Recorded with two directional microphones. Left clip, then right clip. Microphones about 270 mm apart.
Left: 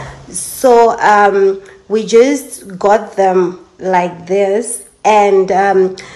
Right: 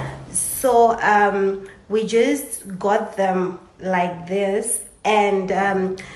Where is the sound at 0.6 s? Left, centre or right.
Centre.